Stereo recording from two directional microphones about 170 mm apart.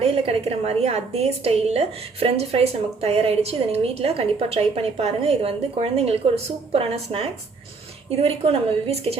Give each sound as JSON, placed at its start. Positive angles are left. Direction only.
{"t": 0.0, "sound": "a woman's voice", "side_deg": -35}